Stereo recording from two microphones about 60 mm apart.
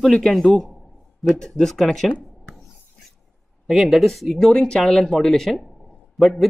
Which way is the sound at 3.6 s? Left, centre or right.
Centre.